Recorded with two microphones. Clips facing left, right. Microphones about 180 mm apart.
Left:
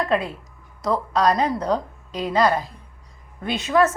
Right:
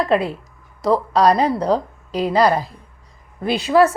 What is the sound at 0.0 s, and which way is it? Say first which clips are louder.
A woman's voice: right 4 dB; 35° right (ahead or behind).